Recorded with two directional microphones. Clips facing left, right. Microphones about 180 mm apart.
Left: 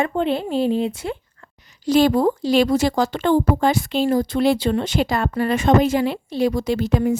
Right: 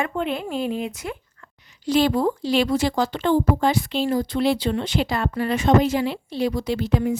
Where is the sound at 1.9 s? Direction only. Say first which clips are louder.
Left 4 dB; 45° left (ahead or behind).